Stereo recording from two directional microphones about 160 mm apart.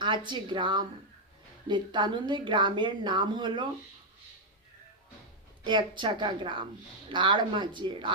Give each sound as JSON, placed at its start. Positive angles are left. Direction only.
{"t": 0.0, "sound": "speech", "side_deg": -30}
{"t": 5.6, "sound": "speech", "side_deg": -30}